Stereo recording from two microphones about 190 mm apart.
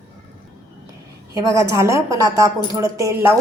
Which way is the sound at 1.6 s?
15° right (ahead or behind).